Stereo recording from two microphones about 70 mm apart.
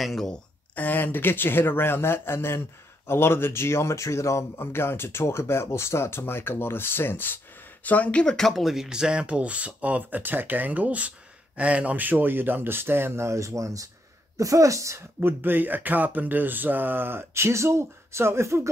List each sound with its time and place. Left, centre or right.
0.0 s speech: centre
0.3 s speech: left
8.4 s speech: centre; by 15.0 s right
15.1 s speech: right